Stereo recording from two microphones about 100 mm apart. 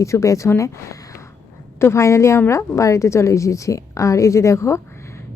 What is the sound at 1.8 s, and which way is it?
A woman's voice, 30° left (ahead or behind).